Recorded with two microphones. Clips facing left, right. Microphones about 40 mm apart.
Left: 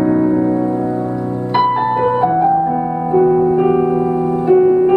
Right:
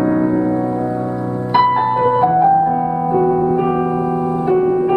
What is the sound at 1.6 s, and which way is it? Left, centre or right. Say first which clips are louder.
Music: right 1 dB; centre.